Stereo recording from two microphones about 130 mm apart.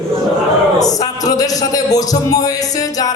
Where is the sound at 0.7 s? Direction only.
30° left (ahead or behind).